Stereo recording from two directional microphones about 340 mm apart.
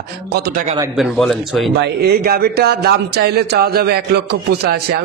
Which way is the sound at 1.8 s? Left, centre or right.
Right.